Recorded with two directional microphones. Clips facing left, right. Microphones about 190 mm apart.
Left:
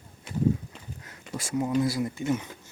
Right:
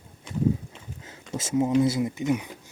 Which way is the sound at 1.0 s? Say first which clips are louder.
Right 4 dB; 25° right (ahead or behind).